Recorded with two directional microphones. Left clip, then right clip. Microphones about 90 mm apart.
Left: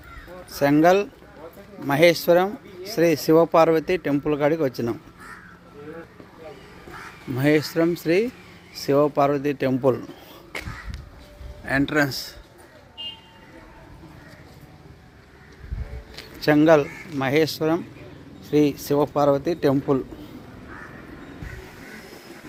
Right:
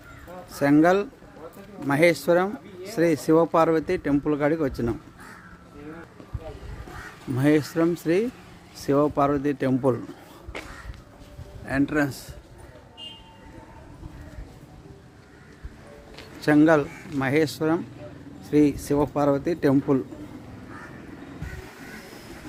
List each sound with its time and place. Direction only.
0.5 s speech: 10° right (ahead or behind)
7.3 s speech: 10° right (ahead or behind)
11.6 s speech: 35° left (ahead or behind)
16.4 s speech: 10° right (ahead or behind)